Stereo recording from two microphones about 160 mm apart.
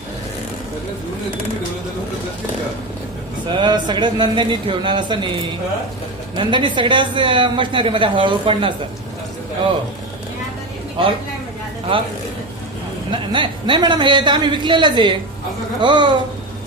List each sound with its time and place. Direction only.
3.4 s a man's voice: 30° right (ahead or behind)
6.3 s a woman's voice: 30° right (ahead or behind)
13.1 s a man's voice: 30° right (ahead or behind)